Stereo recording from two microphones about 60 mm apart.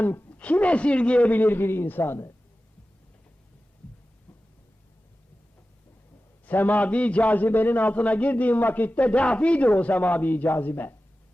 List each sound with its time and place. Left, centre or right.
0.3 s a man's voice: left
6.4 s a man's voice: left